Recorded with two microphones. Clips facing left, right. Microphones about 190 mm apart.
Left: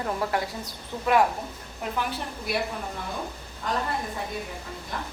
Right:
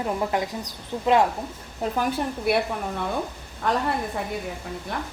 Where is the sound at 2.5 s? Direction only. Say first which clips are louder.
Right 7 dB; 60° right (ahead or behind).